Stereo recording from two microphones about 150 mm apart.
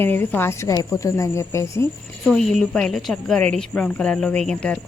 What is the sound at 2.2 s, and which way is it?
A woman's voice, 5° left (ahead or behind).